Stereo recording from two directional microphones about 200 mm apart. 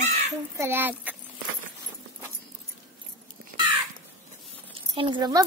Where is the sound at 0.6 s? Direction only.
10° right (ahead or behind).